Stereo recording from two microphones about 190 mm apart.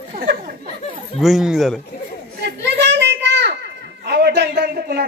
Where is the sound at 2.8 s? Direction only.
65° right (ahead or behind).